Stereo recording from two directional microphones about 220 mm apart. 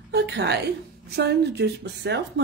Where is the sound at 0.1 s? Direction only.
50° right (ahead or behind).